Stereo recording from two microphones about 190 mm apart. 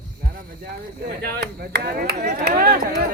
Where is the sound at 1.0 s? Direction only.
55° right (ahead or behind).